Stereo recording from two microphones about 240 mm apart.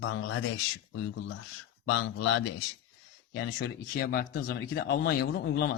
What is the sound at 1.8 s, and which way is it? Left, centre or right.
A man's voice, left.